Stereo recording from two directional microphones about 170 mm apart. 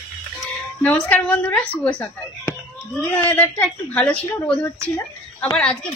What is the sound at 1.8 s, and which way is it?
A woman's voice, 10° left (ahead or behind).